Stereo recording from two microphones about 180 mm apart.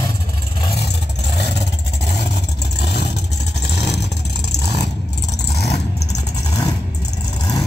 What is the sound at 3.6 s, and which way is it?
Vehicle, 70° left (ahead or behind).